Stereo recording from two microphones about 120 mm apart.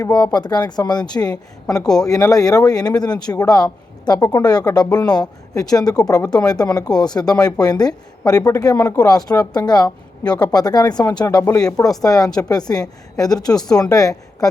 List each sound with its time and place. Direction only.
0.1 s a woman's voice: 35° left (ahead or behind)
1.8 s speech: 5° left (ahead or behind)
2.0 s a woman's voice: 30° left (ahead or behind)